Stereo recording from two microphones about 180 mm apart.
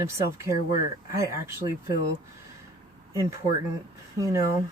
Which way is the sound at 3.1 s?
15° right (ahead or behind).